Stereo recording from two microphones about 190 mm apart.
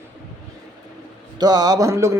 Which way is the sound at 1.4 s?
20° right (ahead or behind).